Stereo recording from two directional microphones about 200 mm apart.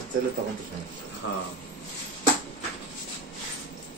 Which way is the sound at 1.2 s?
70° left (ahead or behind).